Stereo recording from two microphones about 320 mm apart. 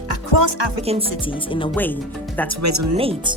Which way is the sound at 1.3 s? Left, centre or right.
Centre.